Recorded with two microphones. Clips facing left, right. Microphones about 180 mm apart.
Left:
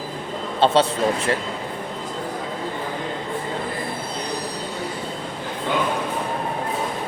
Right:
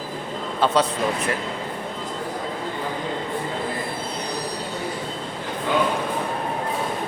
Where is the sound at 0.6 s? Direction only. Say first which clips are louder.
Left 3 dB; 25° left (ahead or behind).